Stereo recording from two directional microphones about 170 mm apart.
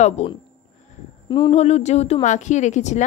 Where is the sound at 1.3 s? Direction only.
25° left (ahead or behind).